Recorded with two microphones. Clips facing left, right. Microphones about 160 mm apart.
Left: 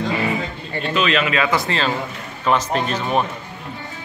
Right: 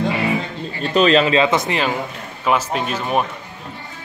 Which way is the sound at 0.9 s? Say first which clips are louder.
Right 6 dB; 35° right (ahead or behind).